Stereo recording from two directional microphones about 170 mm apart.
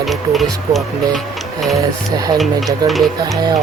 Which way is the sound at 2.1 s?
25° right (ahead or behind).